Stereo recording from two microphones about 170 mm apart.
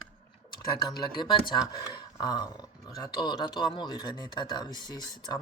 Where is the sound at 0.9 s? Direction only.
25° left (ahead or behind).